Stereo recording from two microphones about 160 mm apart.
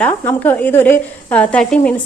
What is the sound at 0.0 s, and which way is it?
A woman's voice, 10° left (ahead or behind).